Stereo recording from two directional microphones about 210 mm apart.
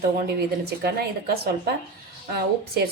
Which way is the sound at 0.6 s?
50° right (ahead or behind).